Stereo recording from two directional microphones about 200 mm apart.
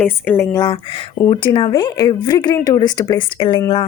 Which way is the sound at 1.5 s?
20° left (ahead or behind).